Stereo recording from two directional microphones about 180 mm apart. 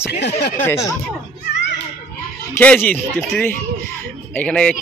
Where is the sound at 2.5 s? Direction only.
10° left (ahead or behind).